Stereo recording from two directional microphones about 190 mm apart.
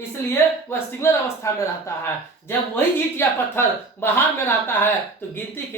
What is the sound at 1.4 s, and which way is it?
Speech, 15° left (ahead or behind).